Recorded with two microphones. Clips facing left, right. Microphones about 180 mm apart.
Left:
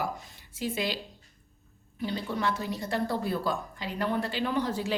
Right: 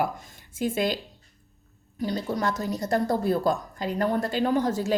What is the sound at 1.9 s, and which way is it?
A woman's voice, 40° right (ahead or behind).